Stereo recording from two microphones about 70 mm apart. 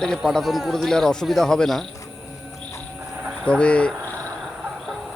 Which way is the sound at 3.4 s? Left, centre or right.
Centre.